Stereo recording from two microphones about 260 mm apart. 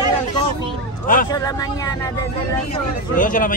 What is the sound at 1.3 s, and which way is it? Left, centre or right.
Speech, centre.